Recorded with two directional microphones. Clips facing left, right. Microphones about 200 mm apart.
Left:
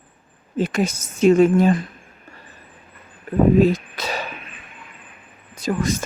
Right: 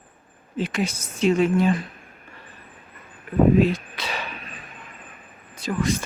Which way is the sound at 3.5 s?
45° left (ahead or behind).